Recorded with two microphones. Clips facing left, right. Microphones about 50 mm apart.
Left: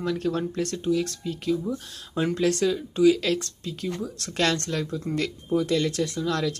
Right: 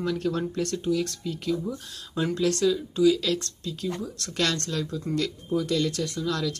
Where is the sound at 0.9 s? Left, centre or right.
Left.